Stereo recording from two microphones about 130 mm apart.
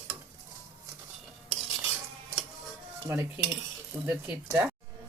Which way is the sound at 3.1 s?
20° right (ahead or behind).